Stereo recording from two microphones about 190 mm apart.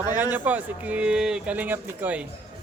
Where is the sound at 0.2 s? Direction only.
10° right (ahead or behind).